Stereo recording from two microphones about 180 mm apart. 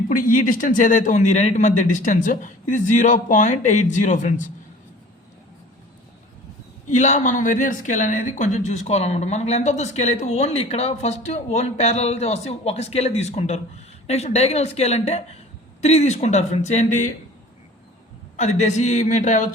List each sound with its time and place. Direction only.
0.1 s a man's voice: 50° left (ahead or behind)
6.9 s speech: 40° left (ahead or behind)
18.3 s speech: 40° left (ahead or behind)